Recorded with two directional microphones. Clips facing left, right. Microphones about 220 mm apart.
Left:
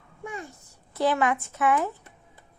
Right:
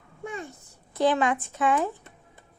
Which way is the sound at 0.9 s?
15° right (ahead or behind).